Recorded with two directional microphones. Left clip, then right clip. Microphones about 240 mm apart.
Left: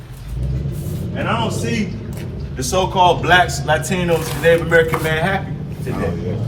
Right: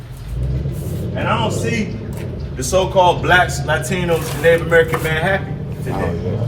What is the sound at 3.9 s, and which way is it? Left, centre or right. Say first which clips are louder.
A man's voice: even; centre.